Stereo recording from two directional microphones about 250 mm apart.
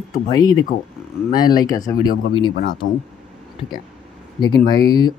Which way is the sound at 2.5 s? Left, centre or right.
Left.